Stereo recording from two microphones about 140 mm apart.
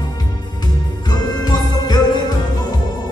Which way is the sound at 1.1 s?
30° left (ahead or behind).